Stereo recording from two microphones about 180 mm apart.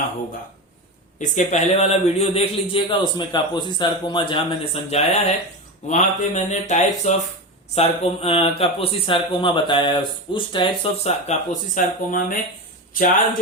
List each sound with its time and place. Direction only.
1.2 s a man's voice: 40° left (ahead or behind)
11.3 s speech: 45° left (ahead or behind)